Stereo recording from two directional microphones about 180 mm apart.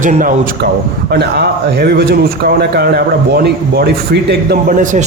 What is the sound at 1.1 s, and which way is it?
Speech, 65° right (ahead or behind).